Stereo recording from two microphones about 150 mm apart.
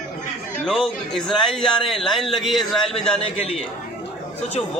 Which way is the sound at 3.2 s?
40° left (ahead or behind).